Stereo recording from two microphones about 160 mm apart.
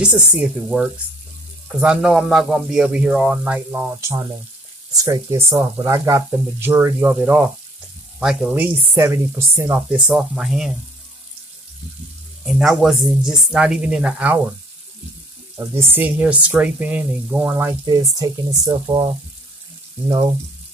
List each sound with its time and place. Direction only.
0.0 s speech: 5° right (ahead or behind)
8.2 s speech: 5° right (ahead or behind)
12.4 s speech: centre (ahead or behind)
15.5 s speech: 15° right (ahead or behind)